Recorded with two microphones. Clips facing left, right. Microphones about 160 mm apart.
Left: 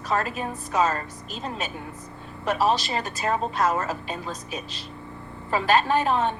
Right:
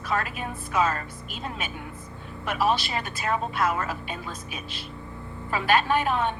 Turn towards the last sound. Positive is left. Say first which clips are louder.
# left 2 dB
turn(degrees=40)  # may be behind; listen again after turning